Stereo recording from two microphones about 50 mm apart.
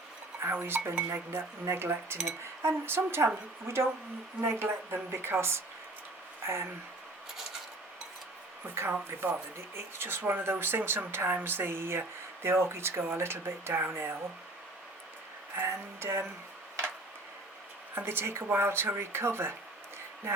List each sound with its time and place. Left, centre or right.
0.6 s speech: right
4.4 s speech: right
8.7 s speech: right
15.6 s speech: right
17.9 s speech: right